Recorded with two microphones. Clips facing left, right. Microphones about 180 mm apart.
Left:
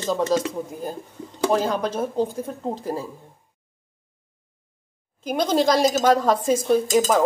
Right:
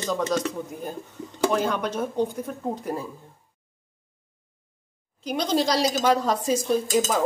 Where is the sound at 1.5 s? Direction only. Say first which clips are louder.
Left 6 dB; 35° left (ahead or behind).